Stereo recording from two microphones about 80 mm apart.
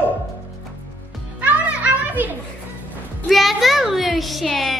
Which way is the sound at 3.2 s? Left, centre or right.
Centre.